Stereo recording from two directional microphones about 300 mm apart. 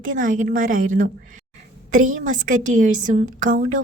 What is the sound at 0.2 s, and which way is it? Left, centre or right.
A woman's voice, right.